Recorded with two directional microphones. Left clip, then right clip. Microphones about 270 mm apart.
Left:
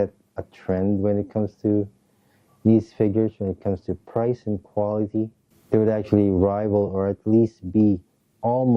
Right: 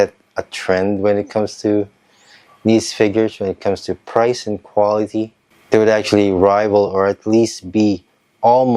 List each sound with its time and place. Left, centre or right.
0.0 s speech: centre
4.6 s speech: centre
4.9 s speech: centre